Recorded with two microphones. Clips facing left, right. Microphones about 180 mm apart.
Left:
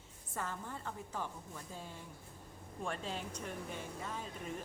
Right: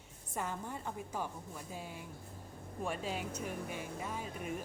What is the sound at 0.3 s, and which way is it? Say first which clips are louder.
A woman's voice: right 3 dB; 15° right (ahead or behind).